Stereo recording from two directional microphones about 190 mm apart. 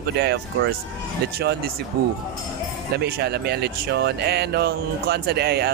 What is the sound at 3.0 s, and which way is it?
Speech, 55° right (ahead or behind).